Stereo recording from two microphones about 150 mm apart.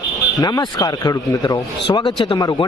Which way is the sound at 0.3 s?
25° left (ahead or behind).